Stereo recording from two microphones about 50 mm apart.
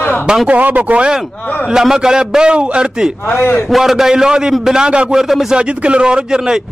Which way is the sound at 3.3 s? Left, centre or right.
Left.